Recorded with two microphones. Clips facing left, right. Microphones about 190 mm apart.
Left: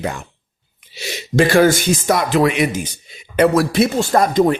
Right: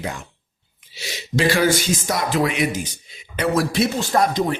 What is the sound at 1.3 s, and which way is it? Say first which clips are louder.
Speech: left 5 dB; 50° left (ahead or behind).